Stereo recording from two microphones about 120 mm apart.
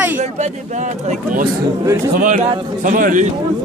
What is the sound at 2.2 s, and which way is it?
A man's voice, 90° right.